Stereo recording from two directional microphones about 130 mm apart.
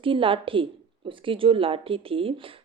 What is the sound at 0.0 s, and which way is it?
A woman's voice, 40° right (ahead or behind).